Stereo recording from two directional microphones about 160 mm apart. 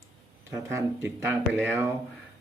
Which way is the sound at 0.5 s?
15° right (ahead or behind).